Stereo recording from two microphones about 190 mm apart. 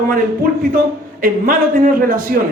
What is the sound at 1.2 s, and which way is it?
Speech, 45° right (ahead or behind).